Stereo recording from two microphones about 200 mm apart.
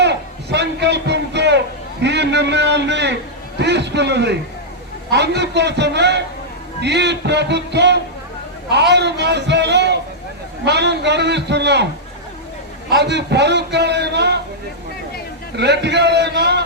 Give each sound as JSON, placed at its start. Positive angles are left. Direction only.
{"t": 0.0, "sound": "a sound", "side_deg": -60}
{"t": 3.6, "sound": "a man's voice", "side_deg": -60}
{"t": 12.9, "sound": "a man's voice", "side_deg": -55}
{"t": 15.5, "sound": "a man's voice", "side_deg": -60}